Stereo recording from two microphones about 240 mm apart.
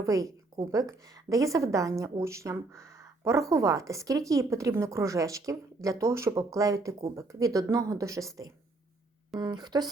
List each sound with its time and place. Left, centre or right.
0.0 s a woman's voice: centre